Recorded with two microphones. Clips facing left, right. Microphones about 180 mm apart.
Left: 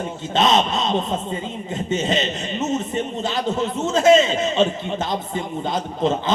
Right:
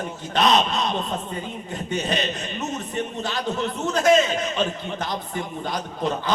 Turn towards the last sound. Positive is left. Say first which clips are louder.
# left 4 dB
turn(degrees=25)  # may be behind; listen again after turning